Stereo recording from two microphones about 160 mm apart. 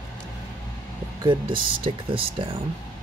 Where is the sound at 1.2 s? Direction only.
30° right (ahead or behind).